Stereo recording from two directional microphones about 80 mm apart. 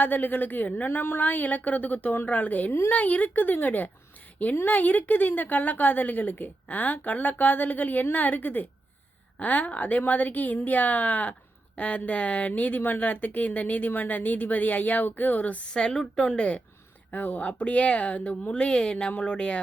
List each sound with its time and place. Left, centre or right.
0.0 s speech: left